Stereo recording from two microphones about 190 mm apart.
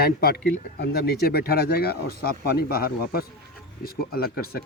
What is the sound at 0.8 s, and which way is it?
Speech, 55° left (ahead or behind).